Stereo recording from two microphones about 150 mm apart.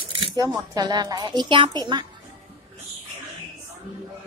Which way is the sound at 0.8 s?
25° right (ahead or behind).